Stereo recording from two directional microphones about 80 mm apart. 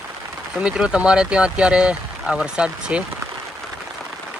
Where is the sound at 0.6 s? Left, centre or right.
Centre.